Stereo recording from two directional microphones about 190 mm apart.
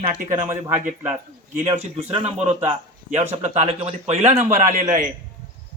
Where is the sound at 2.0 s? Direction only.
30° right (ahead or behind).